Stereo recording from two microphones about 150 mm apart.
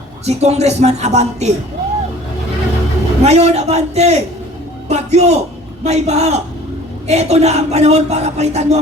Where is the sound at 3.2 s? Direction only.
45° right (ahead or behind).